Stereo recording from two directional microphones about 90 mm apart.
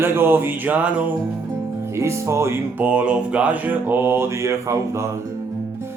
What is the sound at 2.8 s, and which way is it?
Speech, 15° right (ahead or behind).